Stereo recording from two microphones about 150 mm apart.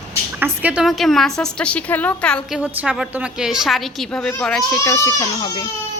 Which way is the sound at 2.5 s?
10° right (ahead or behind).